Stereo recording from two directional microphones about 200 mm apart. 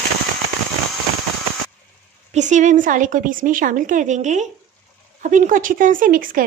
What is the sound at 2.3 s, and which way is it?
A woman's voice, 35° right (ahead or behind).